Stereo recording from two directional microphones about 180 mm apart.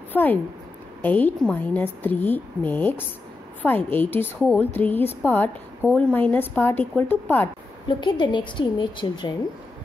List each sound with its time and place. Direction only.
0.1 s a woman's voice: 10° left (ahead or behind)
8.0 s a woman's voice: 25° left (ahead or behind)